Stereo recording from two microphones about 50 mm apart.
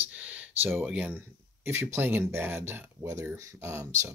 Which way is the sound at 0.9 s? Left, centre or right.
Right.